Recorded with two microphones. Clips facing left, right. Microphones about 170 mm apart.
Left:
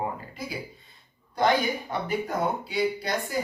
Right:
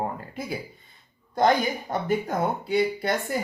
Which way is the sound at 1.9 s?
50° right (ahead or behind).